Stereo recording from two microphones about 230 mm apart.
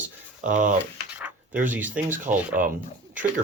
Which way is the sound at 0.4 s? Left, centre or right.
Right.